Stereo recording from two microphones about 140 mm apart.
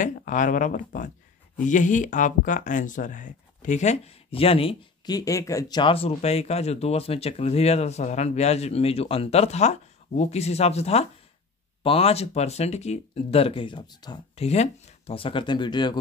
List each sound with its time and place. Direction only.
0.0 s speech: 65° left (ahead or behind); by 4.7 s 40° left (ahead or behind)
5.0 s speech: 25° left (ahead or behind)
5.8 s speech: 40° left (ahead or behind)
14.3 s speech: 50° left (ahead or behind); by 16.0 s 35° left (ahead or behind)